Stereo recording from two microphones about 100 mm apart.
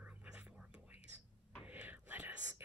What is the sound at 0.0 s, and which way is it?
Whispering, 10° right (ahead or behind).